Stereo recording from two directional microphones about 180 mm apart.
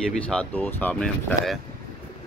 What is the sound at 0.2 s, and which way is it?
Speech, 5° left (ahead or behind).